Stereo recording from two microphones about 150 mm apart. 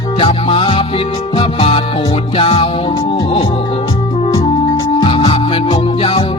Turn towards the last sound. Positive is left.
turn(degrees=35)  # may be behind; listen again after turning